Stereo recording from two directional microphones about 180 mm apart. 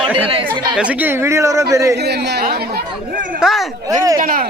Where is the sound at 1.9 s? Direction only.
65° right (ahead or behind); by 3.4 s 50° right (ahead or behind).